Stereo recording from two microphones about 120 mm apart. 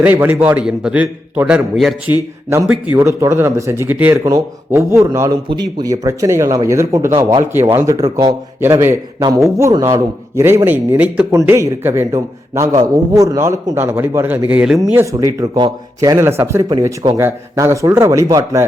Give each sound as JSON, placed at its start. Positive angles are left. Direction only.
{"t": 0.0, "sound": "a man's voice", "side_deg": -15}
{"t": 3.0, "sound": "a man's voice", "side_deg": -25}
{"t": 5.5, "sound": "a man's voice", "side_deg": -35}
{"t": 15.0, "sound": "a man's voice", "side_deg": -25}